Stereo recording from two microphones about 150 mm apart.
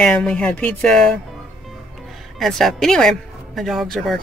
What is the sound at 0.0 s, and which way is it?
Speech, 5° left (ahead or behind).